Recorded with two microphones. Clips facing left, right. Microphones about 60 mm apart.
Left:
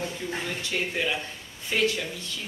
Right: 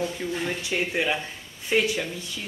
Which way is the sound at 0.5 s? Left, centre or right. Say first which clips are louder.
Right 3 dB; centre.